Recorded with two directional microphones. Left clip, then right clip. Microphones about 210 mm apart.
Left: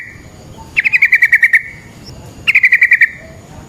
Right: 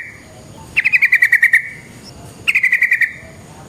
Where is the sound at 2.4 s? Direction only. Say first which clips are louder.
Left 5 dB; 20° left (ahead or behind).